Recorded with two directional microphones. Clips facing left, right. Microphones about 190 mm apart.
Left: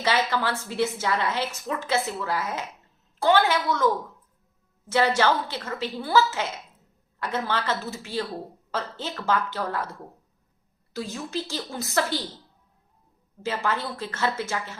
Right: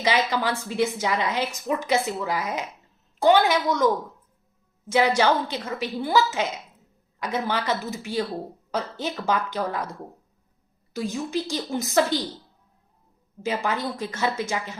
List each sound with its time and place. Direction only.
0.0 s speech: 15° right (ahead or behind)
10.9 s speech: 15° right (ahead or behind)
13.4 s speech: 15° right (ahead or behind)